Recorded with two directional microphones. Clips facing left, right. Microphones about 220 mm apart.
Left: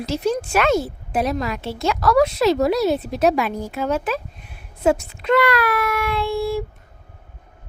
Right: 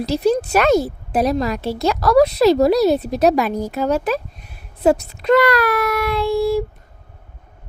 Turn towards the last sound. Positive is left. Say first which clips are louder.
# right 5 dB
turn(degrees=-40)  # may be behind; listen again after turning